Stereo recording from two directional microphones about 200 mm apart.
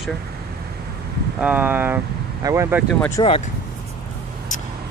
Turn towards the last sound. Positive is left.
turn(degrees=20)  # may be behind; listen again after turning